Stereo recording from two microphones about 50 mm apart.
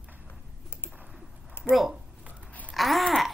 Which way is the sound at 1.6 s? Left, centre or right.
Left.